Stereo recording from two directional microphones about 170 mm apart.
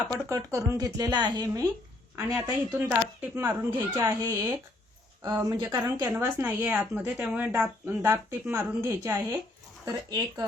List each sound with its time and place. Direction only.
0.1 s speech: 15° right (ahead or behind)
2.7 s speech: 10° right (ahead or behind)